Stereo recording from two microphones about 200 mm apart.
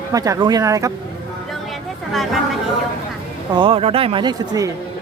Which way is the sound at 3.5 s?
25° right (ahead or behind).